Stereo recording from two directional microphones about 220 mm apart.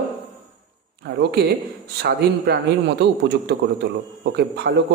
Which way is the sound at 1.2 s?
50° right (ahead or behind).